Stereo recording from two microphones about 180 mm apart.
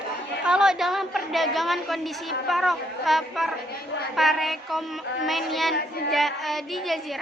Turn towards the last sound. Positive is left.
turn(degrees=0)  # may be behind; listen again after turning